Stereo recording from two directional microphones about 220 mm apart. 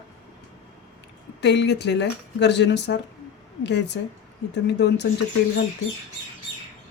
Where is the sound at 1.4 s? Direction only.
50° left (ahead or behind).